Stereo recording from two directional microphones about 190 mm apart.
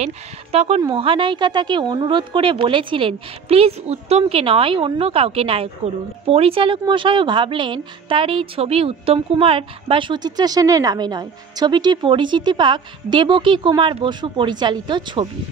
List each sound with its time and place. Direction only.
0.0 s speech: 35° right (ahead or behind)